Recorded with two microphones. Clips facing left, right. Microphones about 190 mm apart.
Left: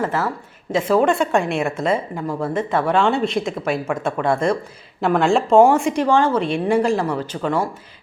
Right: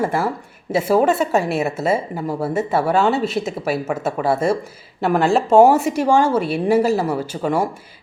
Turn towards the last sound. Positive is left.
turn(degrees=-10)  # may be behind; listen again after turning